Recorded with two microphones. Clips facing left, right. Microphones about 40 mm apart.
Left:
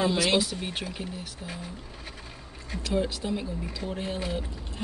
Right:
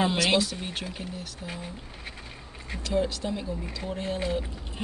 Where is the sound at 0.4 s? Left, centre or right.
Centre.